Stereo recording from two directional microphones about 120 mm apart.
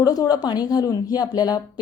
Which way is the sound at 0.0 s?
30° left (ahead or behind).